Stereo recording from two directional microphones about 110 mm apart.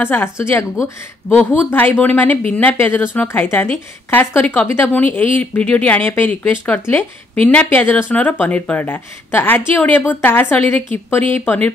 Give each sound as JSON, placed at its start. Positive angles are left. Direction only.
{"t": 0.0, "sound": "a woman's voice", "side_deg": 20}